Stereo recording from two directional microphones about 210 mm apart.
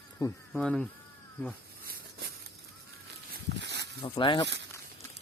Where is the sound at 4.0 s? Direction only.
20° left (ahead or behind).